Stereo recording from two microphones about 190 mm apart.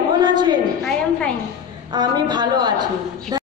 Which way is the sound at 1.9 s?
20° right (ahead or behind).